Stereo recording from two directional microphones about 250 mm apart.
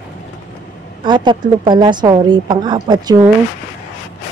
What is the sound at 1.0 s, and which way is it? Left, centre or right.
A woman's voice, centre.